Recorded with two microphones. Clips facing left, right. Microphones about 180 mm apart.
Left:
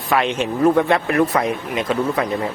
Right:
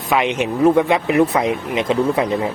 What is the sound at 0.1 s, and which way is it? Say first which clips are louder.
Speech: right 1 dB; 15° right (ahead or behind).